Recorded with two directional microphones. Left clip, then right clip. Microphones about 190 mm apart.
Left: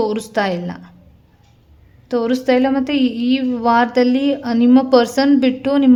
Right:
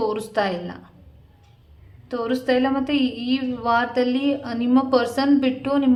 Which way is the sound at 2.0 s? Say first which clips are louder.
Left 6 dB; 40° left (ahead or behind).